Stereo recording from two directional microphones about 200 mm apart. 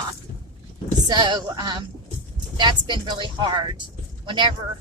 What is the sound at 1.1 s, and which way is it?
Speech, 20° right (ahead or behind).